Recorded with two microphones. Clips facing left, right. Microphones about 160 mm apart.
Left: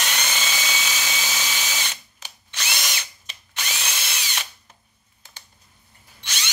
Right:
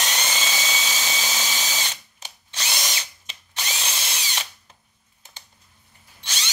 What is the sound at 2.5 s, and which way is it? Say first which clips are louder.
Drill: even; 30° right (ahead or behind).